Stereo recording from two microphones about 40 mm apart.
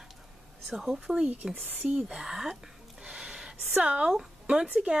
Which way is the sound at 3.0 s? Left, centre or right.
Centre.